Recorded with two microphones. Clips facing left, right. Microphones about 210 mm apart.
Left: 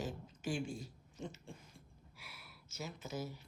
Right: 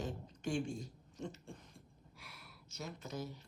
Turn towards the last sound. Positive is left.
turn(degrees=5)  # may be behind; listen again after turning